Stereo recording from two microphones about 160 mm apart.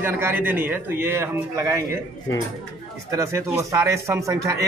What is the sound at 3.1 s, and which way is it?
Speech, 20° right (ahead or behind).